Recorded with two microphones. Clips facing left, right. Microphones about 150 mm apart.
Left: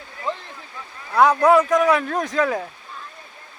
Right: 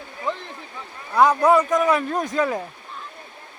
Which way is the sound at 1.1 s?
Centre (ahead or behind).